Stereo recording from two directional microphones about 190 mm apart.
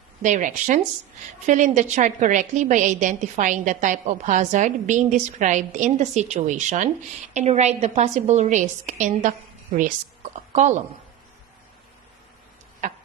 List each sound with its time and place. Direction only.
0.2 s a woman's voice: 40° right (ahead or behind)
10.5 s a woman's voice: 40° right (ahead or behind)
12.8 s a sound: 40° right (ahead or behind)